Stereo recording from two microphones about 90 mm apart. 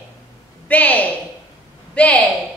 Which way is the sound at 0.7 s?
15° left (ahead or behind).